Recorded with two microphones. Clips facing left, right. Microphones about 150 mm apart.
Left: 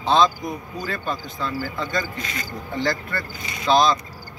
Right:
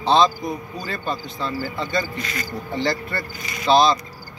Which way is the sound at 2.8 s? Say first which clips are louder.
Even; 10° right (ahead or behind).